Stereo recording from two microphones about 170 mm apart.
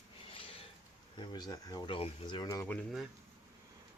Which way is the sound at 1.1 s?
25° left (ahead or behind).